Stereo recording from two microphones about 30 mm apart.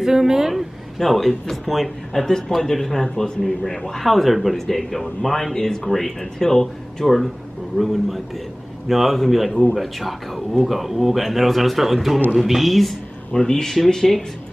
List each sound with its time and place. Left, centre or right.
0.0 s a woman's voice: centre
0.9 s a man's voice: centre
2.2 s speech: centre
4.1 s a man's voice: centre
4.6 s speech: centre
7.7 s a man's voice: centre
13.3 s speech: centre